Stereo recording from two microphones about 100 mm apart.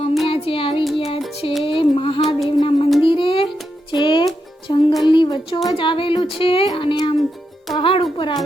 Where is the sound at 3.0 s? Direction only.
60° left (ahead or behind).